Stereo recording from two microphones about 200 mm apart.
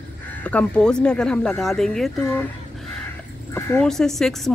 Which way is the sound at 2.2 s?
15° left (ahead or behind).